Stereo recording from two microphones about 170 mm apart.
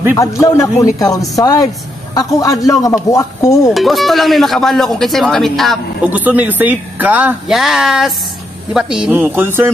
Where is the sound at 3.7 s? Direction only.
Centre (ahead or behind).